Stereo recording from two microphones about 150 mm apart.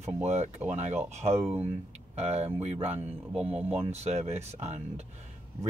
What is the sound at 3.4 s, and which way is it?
Speech, 10° right (ahead or behind).